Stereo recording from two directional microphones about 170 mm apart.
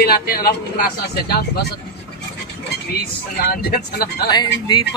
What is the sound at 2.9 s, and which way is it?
Speech, 65° left (ahead or behind).